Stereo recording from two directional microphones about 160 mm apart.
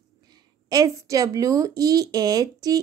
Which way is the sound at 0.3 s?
25° right (ahead or behind).